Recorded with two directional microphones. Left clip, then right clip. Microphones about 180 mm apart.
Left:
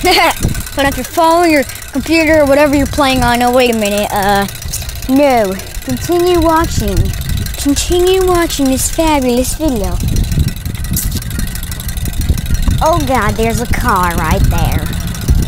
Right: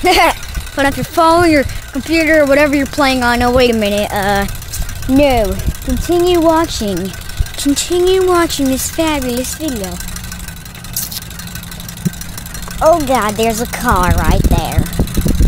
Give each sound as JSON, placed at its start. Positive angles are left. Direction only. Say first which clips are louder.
{"t": 0.0, "sound": "speech", "louder": "even", "side_deg": 5}
{"t": 2.0, "sound": "a woman's voice", "louder": "left 1 dB", "side_deg": 25}
{"t": 2.4, "sound": "speech", "louder": "left 1 dB", "side_deg": 15}
{"t": 6.0, "sound": "speech", "louder": "even", "side_deg": -10}
{"t": 6.5, "sound": "speech", "louder": "left 1 dB", "side_deg": -20}
{"t": 7.7, "sound": "speech", "louder": "left 1 dB", "side_deg": 10}
{"t": 9.1, "sound": "a woman's voice", "louder": "left 5 dB", "side_deg": 30}
{"t": 12.8, "sound": "speech", "louder": "right 1 dB", "side_deg": -15}